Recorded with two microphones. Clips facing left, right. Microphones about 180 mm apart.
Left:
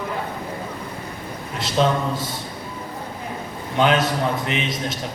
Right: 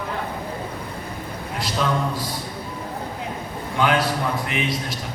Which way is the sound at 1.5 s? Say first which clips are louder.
Left 4 dB; 25° left (ahead or behind).